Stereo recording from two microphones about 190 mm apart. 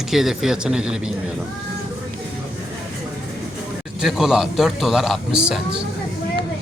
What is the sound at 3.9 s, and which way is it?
Speech, centre (ahead or behind).